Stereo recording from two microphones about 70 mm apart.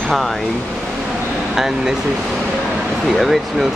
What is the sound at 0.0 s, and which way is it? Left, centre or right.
Speech, centre.